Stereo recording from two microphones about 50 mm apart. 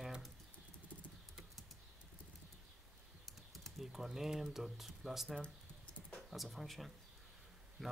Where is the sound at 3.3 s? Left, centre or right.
Centre.